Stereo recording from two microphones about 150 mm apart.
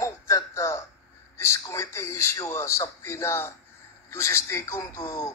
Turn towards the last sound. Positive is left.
turn(degrees=20)  # may be behind; listen again after turning